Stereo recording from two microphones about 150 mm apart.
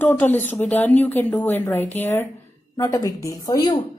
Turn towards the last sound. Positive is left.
turn(degrees=25)  # may be behind; listen again after turning